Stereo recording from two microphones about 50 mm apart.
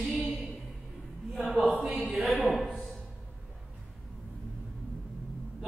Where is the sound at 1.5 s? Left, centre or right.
Centre.